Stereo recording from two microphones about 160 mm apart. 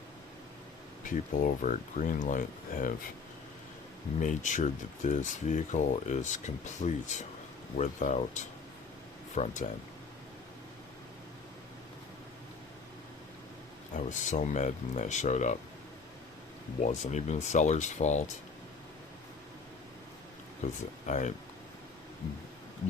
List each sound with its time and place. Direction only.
1.0 s speech: 55° left (ahead or behind)
4.2 s speech: 50° left (ahead or behind)
13.9 s speech: 50° left (ahead or behind)
16.8 s speech: 45° left (ahead or behind)
20.6 s speech: 45° left (ahead or behind)